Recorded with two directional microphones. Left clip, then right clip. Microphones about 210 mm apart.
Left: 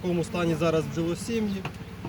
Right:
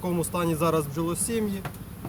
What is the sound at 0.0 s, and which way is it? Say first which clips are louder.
Speech: even; 15° right (ahead or behind).